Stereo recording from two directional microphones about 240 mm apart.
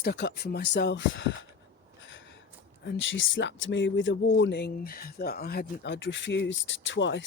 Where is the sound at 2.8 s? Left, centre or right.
Left.